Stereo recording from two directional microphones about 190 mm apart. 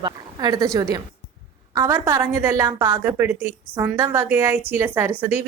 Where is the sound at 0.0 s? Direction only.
20° right (ahead or behind).